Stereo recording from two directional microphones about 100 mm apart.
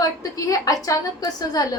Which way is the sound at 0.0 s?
35° left (ahead or behind).